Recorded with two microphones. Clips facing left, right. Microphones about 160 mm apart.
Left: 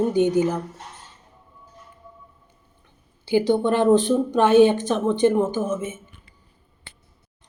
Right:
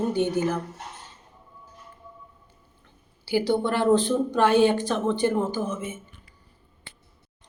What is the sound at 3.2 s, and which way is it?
Speech, 20° left (ahead or behind).